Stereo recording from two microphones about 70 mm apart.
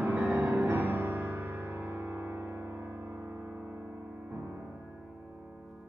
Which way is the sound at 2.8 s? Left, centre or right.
Right.